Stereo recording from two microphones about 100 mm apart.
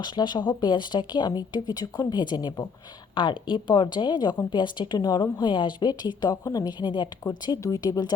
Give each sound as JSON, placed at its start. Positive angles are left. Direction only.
{"t": 0.0, "sound": "speech", "side_deg": 50}
{"t": 7.3, "sound": "speech", "side_deg": 40}